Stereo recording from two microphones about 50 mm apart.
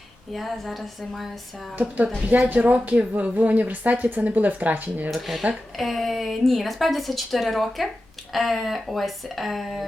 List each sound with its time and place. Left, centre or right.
0.3 s a woman's voice: centre
1.7 s speech: right
5.1 s a woman's voice: centre